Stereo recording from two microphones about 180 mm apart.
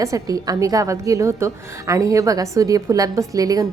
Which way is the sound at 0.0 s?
20° right (ahead or behind).